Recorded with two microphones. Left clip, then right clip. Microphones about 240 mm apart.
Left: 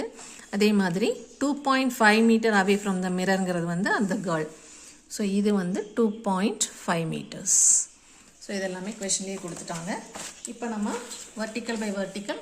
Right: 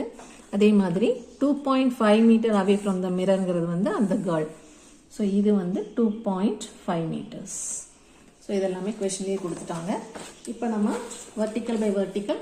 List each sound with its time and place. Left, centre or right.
0.5 s a woman's voice: left
5.1 s a woman's voice: left
8.4 s a woman's voice: left
11.3 s a woman's voice: left